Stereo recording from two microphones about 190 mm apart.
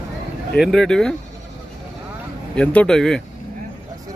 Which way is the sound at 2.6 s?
5° left (ahead or behind).